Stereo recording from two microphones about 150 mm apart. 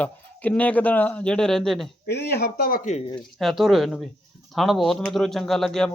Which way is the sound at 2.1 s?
90° left.